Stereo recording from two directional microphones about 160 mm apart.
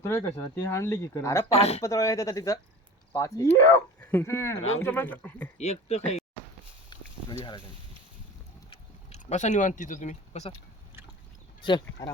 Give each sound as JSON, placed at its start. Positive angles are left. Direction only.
{"t": 0.0, "sound": "speech", "side_deg": 15}
{"t": 1.5, "sound": "speech", "side_deg": 40}
{"t": 1.8, "sound": "speech", "side_deg": 20}
{"t": 5.5, "sound": "speech", "side_deg": 45}
{"t": 6.9, "sound": "a sound", "side_deg": 30}
{"t": 8.7, "sound": "speech", "side_deg": 45}
{"t": 11.6, "sound": "speech", "side_deg": 25}